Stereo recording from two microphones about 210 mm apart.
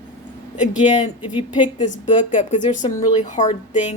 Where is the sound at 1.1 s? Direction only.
10° right (ahead or behind).